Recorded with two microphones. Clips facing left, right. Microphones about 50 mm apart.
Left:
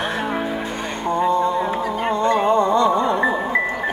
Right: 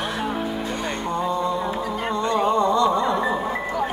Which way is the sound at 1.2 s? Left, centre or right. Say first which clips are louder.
Left 6 dB; left.